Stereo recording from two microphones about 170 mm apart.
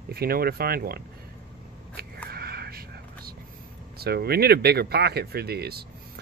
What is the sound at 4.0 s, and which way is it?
Speech, 70° right (ahead or behind).